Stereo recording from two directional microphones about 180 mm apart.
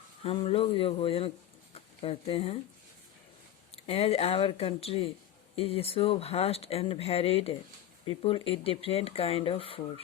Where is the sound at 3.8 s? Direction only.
35° left (ahead or behind).